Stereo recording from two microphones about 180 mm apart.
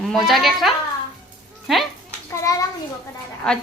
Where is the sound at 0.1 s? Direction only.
Centre (ahead or behind).